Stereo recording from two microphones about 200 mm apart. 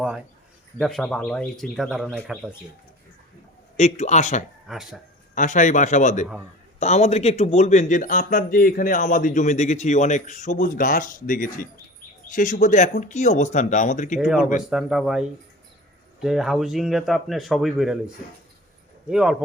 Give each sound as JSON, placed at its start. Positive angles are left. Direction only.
{"t": 0.8, "sound": "a man's voice", "side_deg": 0}
{"t": 3.8, "sound": "speech", "side_deg": 35}
{"t": 4.7, "sound": "a man's voice", "side_deg": 0}
{"t": 5.3, "sound": "speech", "side_deg": 40}
{"t": 14.2, "sound": "a man's voice", "side_deg": 0}
{"t": 19.1, "sound": "a man's voice", "side_deg": 0}